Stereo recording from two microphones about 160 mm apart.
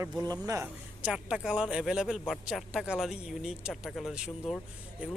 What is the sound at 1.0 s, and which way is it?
Speech, 5° right (ahead or behind).